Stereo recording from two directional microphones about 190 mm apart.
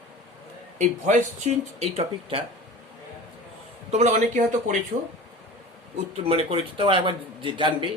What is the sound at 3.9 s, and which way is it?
Speech, 35° right (ahead or behind).